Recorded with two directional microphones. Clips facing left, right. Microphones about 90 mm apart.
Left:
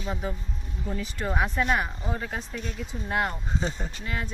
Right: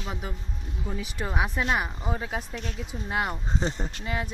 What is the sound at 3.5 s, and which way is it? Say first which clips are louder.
Speech: right 1 dB; 30° right (ahead or behind).